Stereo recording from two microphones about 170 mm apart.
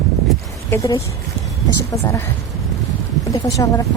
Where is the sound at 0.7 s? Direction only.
20° left (ahead or behind).